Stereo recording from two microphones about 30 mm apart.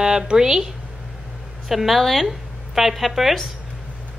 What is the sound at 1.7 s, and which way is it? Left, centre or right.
A woman's voice, centre.